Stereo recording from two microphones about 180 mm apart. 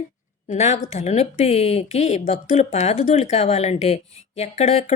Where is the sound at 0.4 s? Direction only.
40° left (ahead or behind).